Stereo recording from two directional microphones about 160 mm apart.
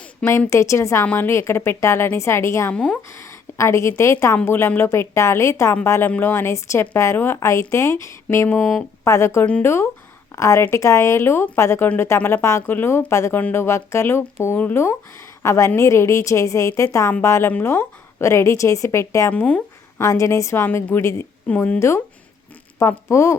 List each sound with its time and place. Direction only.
0.3 s speech: 15° left (ahead or behind)
2.7 s speech: 5° left (ahead or behind)
3.1 s a woman's voice: 20° left (ahead or behind)
20.0 s speech: 20° left (ahead or behind)